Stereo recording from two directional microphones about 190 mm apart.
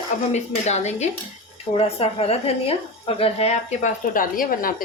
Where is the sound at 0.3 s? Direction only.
35° left (ahead or behind).